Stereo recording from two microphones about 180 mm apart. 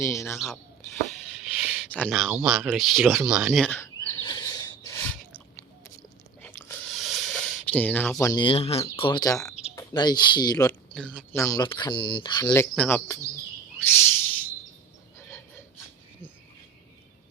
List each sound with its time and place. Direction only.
0.0 s speech: 15° left (ahead or behind)
0.3 s speech: centre (ahead or behind)
3.8 s a sound: 15° left (ahead or behind)
6.4 s a sound: 10° left (ahead or behind)
8.2 s speech: 25° left (ahead or behind)
10.7 s speech: 5° left (ahead or behind); by 12.5 s 25° left (ahead or behind)
12.7 s speech: 5° left (ahead or behind)
13.7 s owl: 10° left (ahead or behind)